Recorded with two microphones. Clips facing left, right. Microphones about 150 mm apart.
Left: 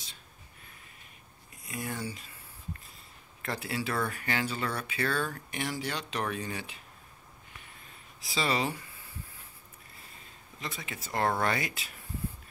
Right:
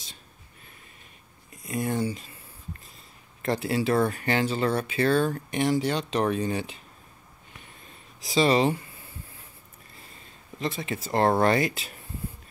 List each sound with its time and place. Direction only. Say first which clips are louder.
1.9 s speech: right 10 dB; 25° right (ahead or behind)
3.4 s speech: right 9 dB; 30° right (ahead or behind)
8.4 s speech: right 9 dB; 25° right (ahead or behind)
10.6 s speech: right 10 dB; 30° right (ahead or behind)